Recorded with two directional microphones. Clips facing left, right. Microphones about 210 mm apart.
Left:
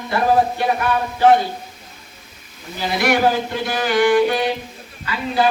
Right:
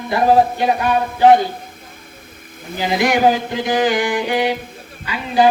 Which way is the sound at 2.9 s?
15° right (ahead or behind).